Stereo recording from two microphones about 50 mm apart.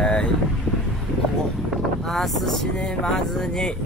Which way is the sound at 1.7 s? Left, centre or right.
Centre.